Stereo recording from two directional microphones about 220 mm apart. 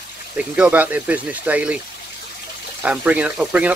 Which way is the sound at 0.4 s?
5° right (ahead or behind).